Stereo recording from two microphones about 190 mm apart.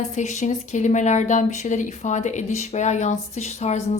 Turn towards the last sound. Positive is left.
turn(degrees=35)  # may be behind; listen again after turning